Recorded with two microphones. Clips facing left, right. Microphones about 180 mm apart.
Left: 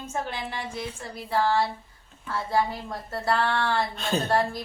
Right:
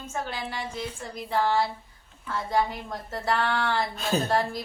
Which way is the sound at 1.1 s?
Centre (ahead or behind).